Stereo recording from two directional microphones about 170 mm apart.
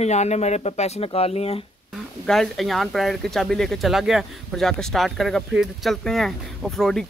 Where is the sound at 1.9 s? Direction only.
Centre (ahead or behind).